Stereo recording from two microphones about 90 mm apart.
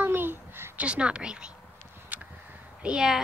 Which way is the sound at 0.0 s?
20° right (ahead or behind).